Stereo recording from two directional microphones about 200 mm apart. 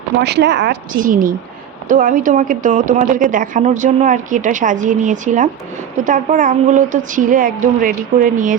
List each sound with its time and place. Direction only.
0.2 s speech: 55° right (ahead or behind)
1.0 s a woman's voice: 45° right (ahead or behind)